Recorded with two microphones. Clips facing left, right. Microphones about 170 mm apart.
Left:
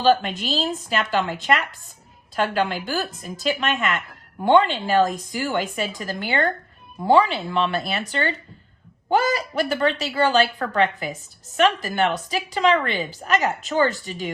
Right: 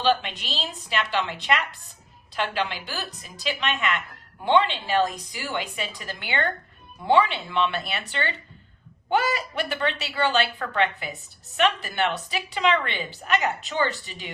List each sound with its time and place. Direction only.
0.0 s a woman's voice: 40° left (ahead or behind)